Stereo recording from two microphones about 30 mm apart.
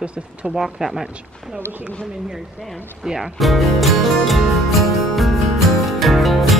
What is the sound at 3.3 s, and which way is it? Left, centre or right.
Music, centre.